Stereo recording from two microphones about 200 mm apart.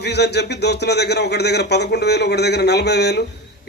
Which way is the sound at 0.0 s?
55° left (ahead or behind).